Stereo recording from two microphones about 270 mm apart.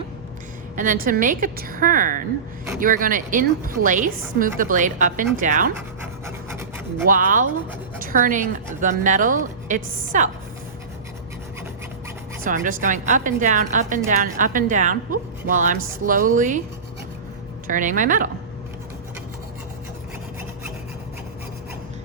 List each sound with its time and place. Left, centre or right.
0.8 s a woman's voice: right
6.2 s rub: centre
7.1 s a woman's voice: right
12.4 s a woman's voice: right
17.7 s a woman's voice: right